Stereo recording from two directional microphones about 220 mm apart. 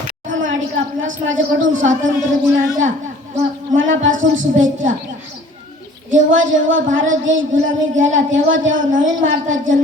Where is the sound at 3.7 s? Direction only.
60° right (ahead or behind).